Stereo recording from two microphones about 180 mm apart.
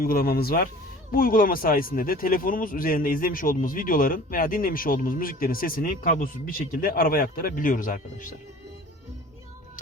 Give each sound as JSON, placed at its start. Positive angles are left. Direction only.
{"t": 0.0, "sound": "speech", "side_deg": 55}